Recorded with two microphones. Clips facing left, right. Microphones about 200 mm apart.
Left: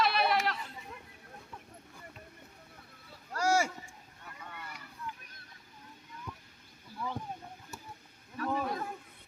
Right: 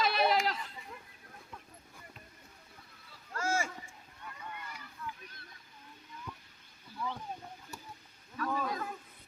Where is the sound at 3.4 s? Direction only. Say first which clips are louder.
Left 5 dB; 75° left (ahead or behind).